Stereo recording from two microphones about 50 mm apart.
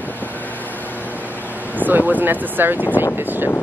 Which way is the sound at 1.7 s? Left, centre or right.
Right.